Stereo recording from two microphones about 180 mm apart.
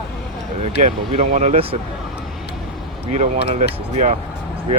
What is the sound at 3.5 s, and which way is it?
Speech, 40° right (ahead or behind).